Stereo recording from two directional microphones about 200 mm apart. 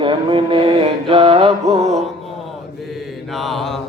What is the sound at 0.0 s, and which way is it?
Music, 25° right (ahead or behind).